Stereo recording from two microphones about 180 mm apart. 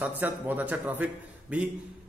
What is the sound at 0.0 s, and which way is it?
A man's voice, 10° right (ahead or behind).